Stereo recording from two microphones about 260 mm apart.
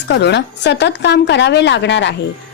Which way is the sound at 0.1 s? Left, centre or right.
Left.